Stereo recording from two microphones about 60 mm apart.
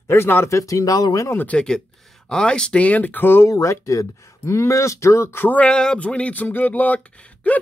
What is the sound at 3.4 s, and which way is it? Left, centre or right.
Speech, left.